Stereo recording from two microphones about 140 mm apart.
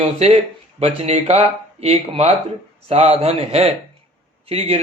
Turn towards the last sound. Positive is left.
turn(degrees=-45)  # may be behind; listen again after turning